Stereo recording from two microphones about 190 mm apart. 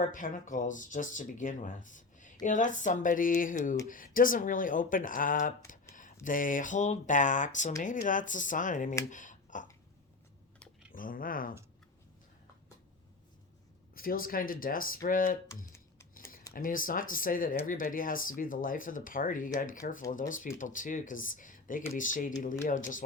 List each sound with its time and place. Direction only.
0.0 s speech: 45° left (ahead or behind)
5.9 s a sound: 45° left (ahead or behind)
6.2 s speech: 45° left (ahead or behind)
10.9 s speech: 45° left (ahead or behind)
13.9 s speech: 50° left (ahead or behind)
15.4 s computer keyboard: 15° left (ahead or behind)
16.5 s speech: 45° left (ahead or behind)